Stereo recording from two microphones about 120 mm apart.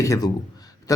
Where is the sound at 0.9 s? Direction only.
30° left (ahead or behind).